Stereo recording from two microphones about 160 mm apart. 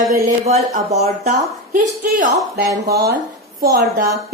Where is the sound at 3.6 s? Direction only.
70° right (ahead or behind).